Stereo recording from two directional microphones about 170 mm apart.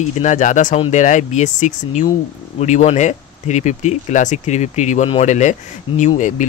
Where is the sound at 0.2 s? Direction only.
50° left (ahead or behind).